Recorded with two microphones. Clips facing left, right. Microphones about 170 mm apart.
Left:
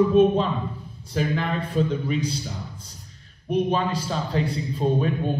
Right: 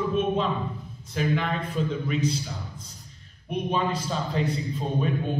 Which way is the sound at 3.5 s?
35° left (ahead or behind).